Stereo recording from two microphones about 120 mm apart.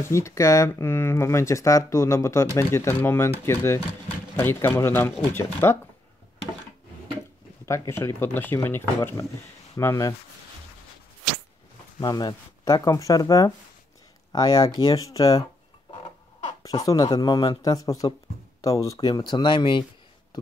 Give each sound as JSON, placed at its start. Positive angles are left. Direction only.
{"t": 0.0, "sound": "speech", "side_deg": 25}
{"t": 7.6, "sound": "speech", "side_deg": 25}
{"t": 12.0, "sound": "speech", "side_deg": 35}
{"t": 16.8, "sound": "speech", "side_deg": 30}